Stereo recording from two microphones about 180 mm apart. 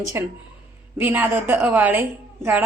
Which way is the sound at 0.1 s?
15° right (ahead or behind).